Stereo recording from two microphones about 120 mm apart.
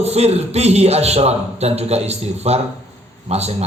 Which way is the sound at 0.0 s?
60° right (ahead or behind).